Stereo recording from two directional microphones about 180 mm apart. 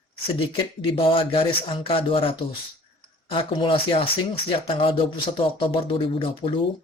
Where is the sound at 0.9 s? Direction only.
30° left (ahead or behind).